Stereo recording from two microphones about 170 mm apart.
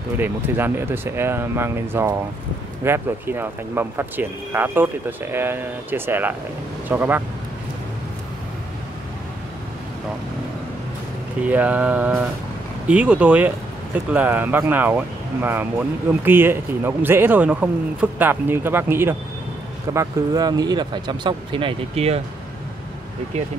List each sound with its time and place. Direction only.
0.2 s speech: 10° right (ahead or behind)
11.4 s speech: 10° right (ahead or behind); by 22.2 s 35° right (ahead or behind)